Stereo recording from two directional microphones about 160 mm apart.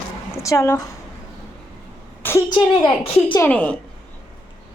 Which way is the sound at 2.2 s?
15° left (ahead or behind).